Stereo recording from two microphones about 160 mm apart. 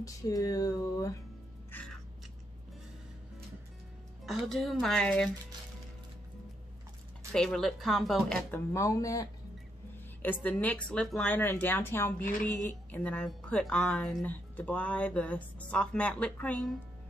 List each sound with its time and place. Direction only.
0.0 s a sound: 20° left (ahead or behind)
1.7 s music: 10° left (ahead or behind)
4.3 s speech: centre (ahead or behind)
7.3 s speech: 5° left (ahead or behind); by 9.3 s 20° left (ahead or behind)
10.2 s a woman's voice: 10° left (ahead or behind)